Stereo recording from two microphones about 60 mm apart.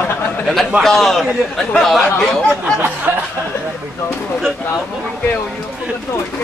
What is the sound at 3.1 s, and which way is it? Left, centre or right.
Speech, right.